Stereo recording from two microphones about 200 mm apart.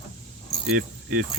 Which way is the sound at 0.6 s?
50° right (ahead or behind).